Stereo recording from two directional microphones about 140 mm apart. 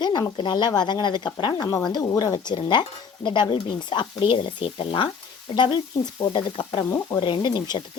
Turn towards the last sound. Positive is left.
turn(degrees=30)  # may be behind; listen again after turning